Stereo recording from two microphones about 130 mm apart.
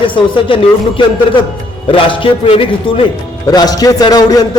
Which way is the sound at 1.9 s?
40° left (ahead or behind).